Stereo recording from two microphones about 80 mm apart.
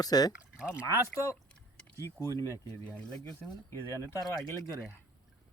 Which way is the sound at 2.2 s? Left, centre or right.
Left.